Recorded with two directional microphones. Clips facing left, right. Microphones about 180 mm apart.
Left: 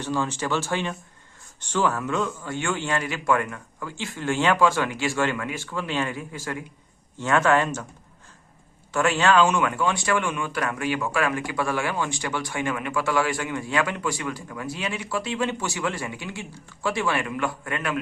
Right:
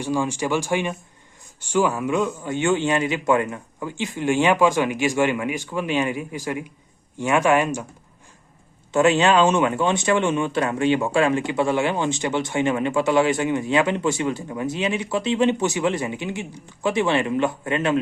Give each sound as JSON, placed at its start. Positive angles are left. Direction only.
{"t": 0.0, "sound": "speech", "side_deg": -10}
{"t": 8.9, "sound": "speech", "side_deg": -20}